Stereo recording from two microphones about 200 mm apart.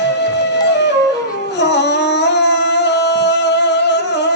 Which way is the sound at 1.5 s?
60° left (ahead or behind).